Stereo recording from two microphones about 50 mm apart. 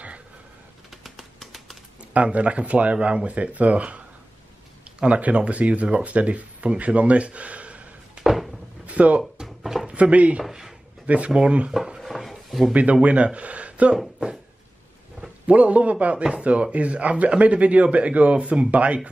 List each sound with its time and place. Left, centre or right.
0.8 s a sound: centre
2.1 s speech: right
5.0 s speech: right
8.2 s a sound: centre
8.8 s music: right
9.4 s drawer open or close: centre
9.8 s speech: right
10.4 s a sound: centre
11.1 s speech: right
12.0 s a sound: centre
12.7 s speech: right
15.4 s speech: right